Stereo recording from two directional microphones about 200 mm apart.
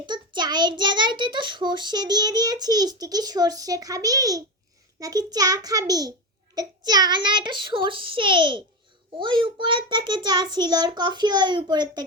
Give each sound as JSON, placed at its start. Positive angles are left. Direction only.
{"t": 0.0, "sound": "a child's voice", "side_deg": -20}